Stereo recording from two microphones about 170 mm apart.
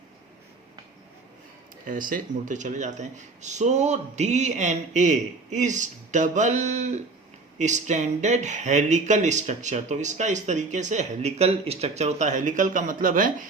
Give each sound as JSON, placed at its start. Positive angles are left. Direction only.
{"t": 1.9, "sound": "speech", "side_deg": -55}